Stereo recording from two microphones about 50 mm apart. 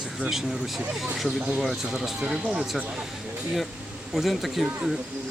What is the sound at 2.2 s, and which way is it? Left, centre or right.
Speech, centre.